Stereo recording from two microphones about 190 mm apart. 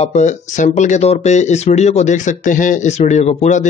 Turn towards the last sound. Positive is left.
turn(degrees=40)  # may be behind; listen again after turning